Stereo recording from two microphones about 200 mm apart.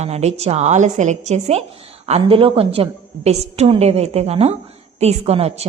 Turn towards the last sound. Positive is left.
turn(degrees=-30)  # may be behind; listen again after turning